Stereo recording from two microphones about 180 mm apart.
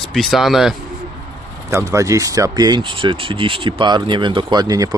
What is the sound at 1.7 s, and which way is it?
Speech, 15° right (ahead or behind).